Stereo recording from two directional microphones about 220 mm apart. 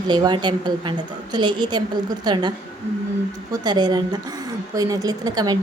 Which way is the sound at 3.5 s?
20° right (ahead or behind).